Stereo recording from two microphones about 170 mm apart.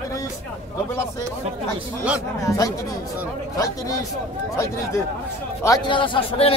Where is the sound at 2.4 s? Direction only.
20° left (ahead or behind).